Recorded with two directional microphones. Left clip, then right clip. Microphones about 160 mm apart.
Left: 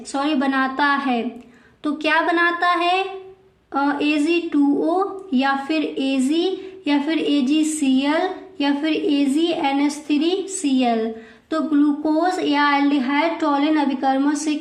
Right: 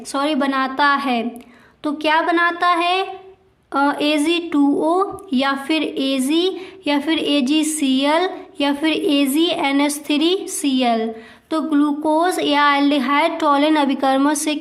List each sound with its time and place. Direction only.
0.1 s a woman's voice: 35° right (ahead or behind)
1.8 s a woman's voice: 30° right (ahead or behind); by 14.6 s 60° right (ahead or behind)